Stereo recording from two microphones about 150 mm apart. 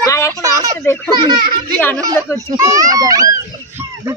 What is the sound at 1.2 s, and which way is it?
A child's voice, 30° right (ahead or behind).